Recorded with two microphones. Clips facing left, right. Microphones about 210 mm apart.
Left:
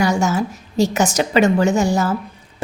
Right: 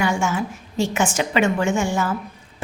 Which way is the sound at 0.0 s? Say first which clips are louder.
Left 4 dB; 40° left (ahead or behind).